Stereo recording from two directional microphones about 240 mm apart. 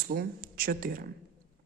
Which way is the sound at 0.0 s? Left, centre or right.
Right.